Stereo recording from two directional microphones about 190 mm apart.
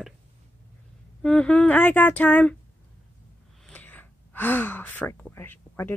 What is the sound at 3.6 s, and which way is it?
Gasp, 10° left (ahead or behind).